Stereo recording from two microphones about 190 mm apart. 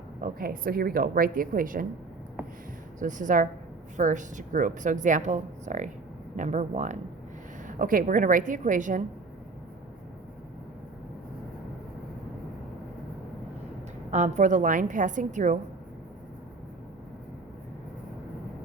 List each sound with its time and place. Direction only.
0.2 s speech: 50° right (ahead or behind)
3.0 s a woman's voice: 40° right (ahead or behind)
14.1 s a woman's voice: 40° right (ahead or behind)